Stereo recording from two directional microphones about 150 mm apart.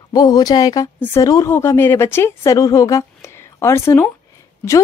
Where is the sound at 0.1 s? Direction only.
25° left (ahead or behind).